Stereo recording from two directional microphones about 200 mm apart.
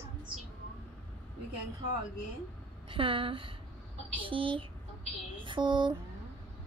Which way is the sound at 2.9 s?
25° right (ahead or behind).